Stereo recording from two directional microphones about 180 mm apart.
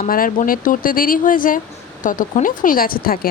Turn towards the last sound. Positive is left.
turn(degrees=55)  # may be behind; listen again after turning